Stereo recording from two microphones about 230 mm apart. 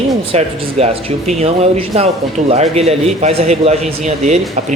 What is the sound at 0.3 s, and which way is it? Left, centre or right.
A man's voice, right.